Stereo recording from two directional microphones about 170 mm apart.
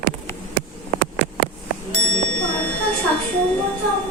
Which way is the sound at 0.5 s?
75° right (ahead or behind).